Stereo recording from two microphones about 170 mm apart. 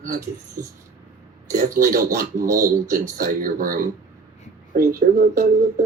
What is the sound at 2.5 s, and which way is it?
Speech, 50° right (ahead or behind).